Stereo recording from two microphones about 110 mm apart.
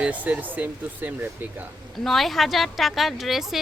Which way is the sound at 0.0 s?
15° right (ahead or behind).